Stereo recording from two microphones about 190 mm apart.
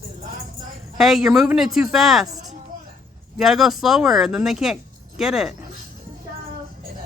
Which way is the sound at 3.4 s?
Centre (ahead or behind).